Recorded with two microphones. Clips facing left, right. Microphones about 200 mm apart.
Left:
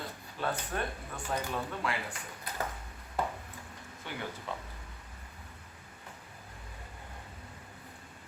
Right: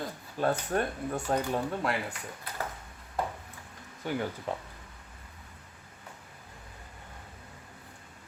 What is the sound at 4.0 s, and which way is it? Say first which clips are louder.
Speech: right 8 dB; 45° right (ahead or behind).